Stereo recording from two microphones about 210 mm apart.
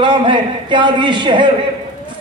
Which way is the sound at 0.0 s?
25° right (ahead or behind).